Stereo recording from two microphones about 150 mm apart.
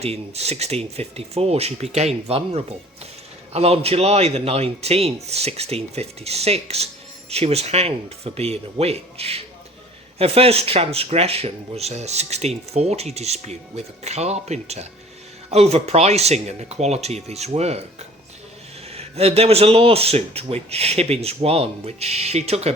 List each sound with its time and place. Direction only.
0.0 s speech: 45° right (ahead or behind)
18.9 s speech: 45° right (ahead or behind)